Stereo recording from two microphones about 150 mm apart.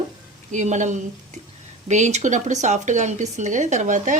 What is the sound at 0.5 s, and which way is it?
Speech, 55° right (ahead or behind).